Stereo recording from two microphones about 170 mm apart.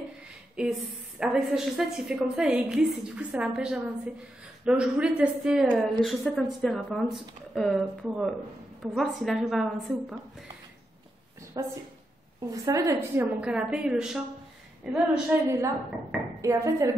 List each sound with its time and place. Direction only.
0.6 s a woman's voice: 5° right (ahead or behind)
11.6 s a woman's voice: 20° right (ahead or behind)
15.4 s a woman's voice: 20° right (ahead or behind)